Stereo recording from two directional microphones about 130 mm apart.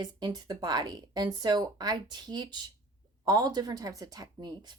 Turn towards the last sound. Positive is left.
turn(degrees=-30)  # may be behind; listen again after turning